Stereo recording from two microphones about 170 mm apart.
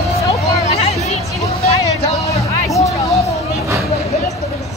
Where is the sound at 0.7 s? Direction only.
40° left (ahead or behind).